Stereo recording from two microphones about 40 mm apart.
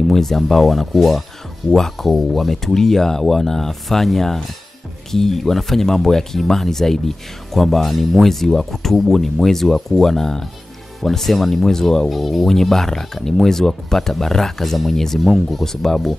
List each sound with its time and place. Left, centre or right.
0.1 s speech: centre
12.1 s speech: centre
15.6 s speech: centre